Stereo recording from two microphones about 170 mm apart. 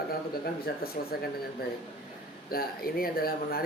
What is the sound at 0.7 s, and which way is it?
Speech, 65° left (ahead or behind).